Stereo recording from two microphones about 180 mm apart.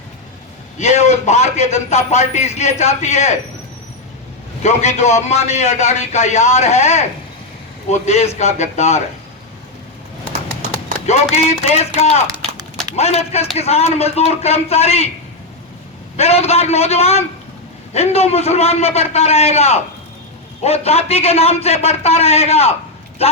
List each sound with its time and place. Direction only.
0.8 s a man's voice: 40° left (ahead or behind)
4.6 s a man's voice: 40° left (ahead or behind)
11.0 s a man's voice: 40° left (ahead or behind)
16.1 s a man's voice: 35° left (ahead or behind)